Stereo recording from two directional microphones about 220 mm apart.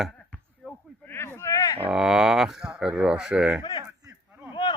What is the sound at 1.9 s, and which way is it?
Speech, centre (ahead or behind).